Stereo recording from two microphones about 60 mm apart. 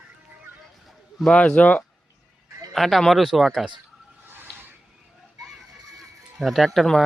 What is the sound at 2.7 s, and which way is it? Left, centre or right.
Speech, centre.